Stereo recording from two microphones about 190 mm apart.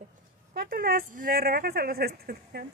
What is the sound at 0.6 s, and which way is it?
Speech, 50° right (ahead or behind).